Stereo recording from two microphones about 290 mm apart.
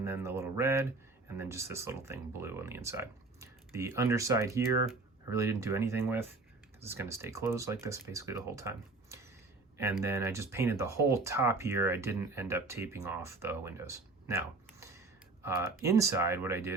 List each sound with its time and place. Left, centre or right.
0.0 s speech: centre